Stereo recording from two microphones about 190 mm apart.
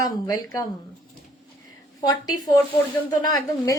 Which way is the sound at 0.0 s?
20° left (ahead or behind).